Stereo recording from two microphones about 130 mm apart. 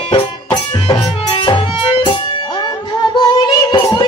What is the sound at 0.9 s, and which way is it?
Music, 40° left (ahead or behind).